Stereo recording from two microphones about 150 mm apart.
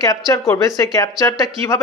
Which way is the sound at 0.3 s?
20° left (ahead or behind).